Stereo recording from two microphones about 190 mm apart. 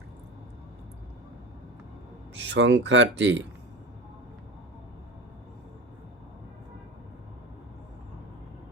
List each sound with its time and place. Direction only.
2.4 s speech: 70° right (ahead or behind)